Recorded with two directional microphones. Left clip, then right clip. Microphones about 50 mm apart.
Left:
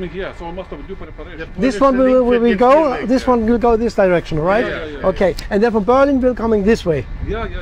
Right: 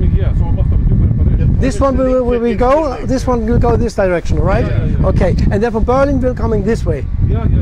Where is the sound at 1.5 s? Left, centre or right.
Right.